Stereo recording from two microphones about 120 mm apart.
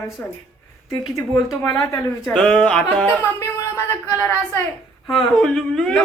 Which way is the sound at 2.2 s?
5° left (ahead or behind).